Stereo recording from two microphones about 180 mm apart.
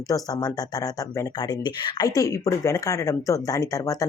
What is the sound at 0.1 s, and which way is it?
Speech, 20° left (ahead or behind).